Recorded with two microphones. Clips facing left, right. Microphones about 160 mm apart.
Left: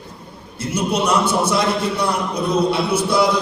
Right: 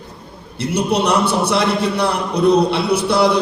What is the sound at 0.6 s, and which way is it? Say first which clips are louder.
A man's voice: right 3 dB; 65° right (ahead or behind).